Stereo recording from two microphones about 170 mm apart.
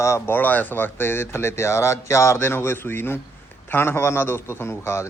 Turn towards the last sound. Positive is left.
turn(degrees=15)  # may be behind; listen again after turning